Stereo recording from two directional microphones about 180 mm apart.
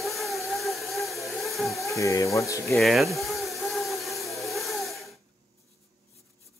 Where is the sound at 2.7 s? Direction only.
Centre (ahead or behind).